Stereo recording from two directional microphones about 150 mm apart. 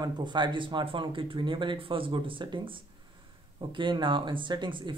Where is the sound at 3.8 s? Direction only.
30° right (ahead or behind).